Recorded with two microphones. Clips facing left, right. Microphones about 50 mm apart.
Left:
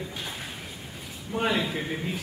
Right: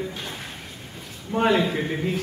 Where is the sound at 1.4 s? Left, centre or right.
Centre.